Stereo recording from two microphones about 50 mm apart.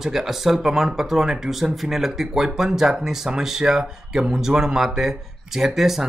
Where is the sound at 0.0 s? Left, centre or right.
Centre.